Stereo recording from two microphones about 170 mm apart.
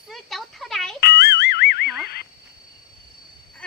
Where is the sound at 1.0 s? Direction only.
75° left (ahead or behind).